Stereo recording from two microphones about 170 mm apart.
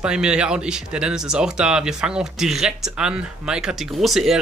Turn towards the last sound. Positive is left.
turn(degrees=0)  # may be behind; listen again after turning